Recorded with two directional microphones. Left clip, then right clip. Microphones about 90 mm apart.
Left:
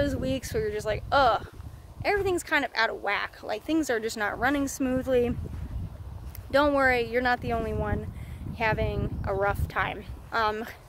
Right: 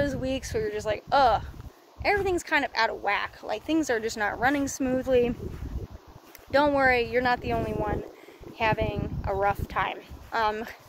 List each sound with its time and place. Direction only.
0.0 s speech: 55° left (ahead or behind); by 5.3 s 30° left (ahead or behind)
6.5 s speech: 45° left (ahead or behind)